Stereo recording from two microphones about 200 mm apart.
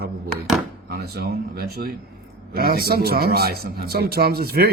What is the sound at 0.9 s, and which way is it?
A man's voice, 50° right (ahead or behind).